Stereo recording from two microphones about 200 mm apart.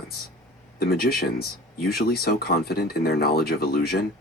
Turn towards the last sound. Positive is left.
turn(degrees=50)  # may be behind; listen again after turning